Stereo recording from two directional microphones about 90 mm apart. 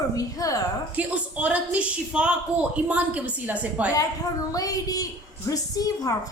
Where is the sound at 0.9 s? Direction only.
15° right (ahead or behind).